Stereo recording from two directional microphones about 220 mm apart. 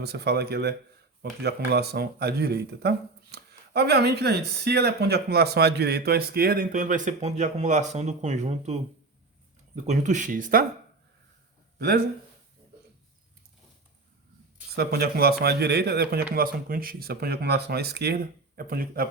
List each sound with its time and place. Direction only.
0.0 s speech: 50° right (ahead or behind)
11.8 s speech: 45° right (ahead or behind)
14.8 s speech: 45° right (ahead or behind)